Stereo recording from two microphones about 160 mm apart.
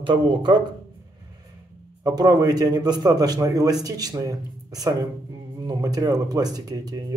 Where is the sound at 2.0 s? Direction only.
25° right (ahead or behind).